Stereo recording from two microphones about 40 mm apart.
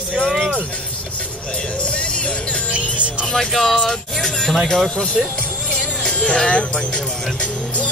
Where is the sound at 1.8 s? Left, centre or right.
Left.